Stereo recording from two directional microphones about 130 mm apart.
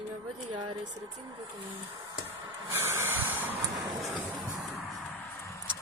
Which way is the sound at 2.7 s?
20° right (ahead or behind).